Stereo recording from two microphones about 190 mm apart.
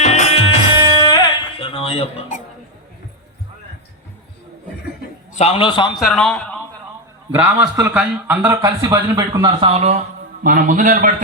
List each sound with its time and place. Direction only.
0.0 s music: 35° left (ahead or behind)
0.9 s music: 20° left (ahead or behind)
5.3 s a man's voice: 35° left (ahead or behind)
6.1 s a man's voice: 5° left (ahead or behind)
7.3 s a man's voice: 15° right (ahead or behind)
9.6 s a man's voice: 35° right (ahead or behind)
10.4 s a man's voice: 45° right (ahead or behind)